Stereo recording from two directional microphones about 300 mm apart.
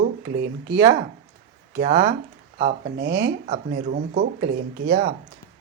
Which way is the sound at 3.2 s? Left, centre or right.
Right.